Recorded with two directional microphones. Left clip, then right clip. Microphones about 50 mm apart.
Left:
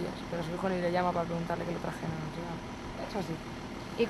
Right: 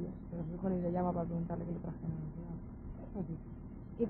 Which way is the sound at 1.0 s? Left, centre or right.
Left.